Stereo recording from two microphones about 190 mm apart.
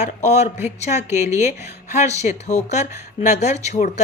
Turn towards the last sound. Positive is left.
turn(degrees=40)  # may be behind; listen again after turning